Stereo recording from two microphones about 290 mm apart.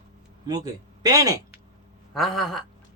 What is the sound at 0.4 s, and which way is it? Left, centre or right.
Speech, centre.